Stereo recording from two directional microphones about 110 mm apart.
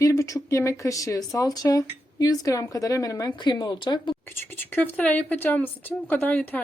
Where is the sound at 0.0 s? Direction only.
30° left (ahead or behind); by 4.1 s 45° left (ahead or behind).